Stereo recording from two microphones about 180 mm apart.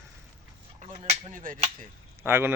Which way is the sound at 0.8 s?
40° right (ahead or behind).